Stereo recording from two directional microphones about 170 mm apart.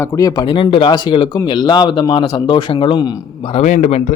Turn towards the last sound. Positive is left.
turn(degrees=45)  # may be behind; listen again after turning